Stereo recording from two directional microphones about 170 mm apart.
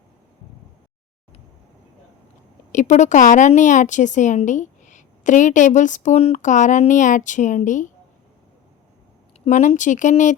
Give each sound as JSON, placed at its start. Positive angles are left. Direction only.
{"t": 2.7, "sound": "a woman's voice", "side_deg": 45}
{"t": 9.4, "sound": "a woman's voice", "side_deg": 45}